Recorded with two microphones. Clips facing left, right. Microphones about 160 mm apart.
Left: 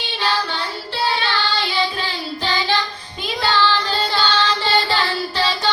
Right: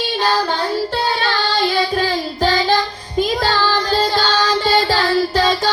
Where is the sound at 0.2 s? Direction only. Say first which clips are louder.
Right 4 dB; 45° right (ahead or behind).